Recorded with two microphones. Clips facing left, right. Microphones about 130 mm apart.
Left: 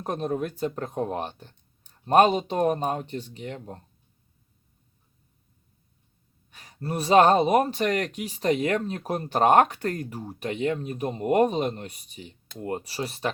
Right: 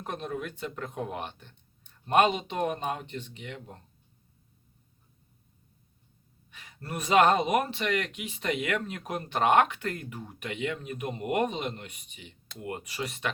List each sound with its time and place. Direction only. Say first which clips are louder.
0.0 s speech: left 7 dB; 40° left (ahead or behind)
6.5 s a sound: left 1 dB; 40° left (ahead or behind)
6.7 s speech: left 5 dB; 35° left (ahead or behind)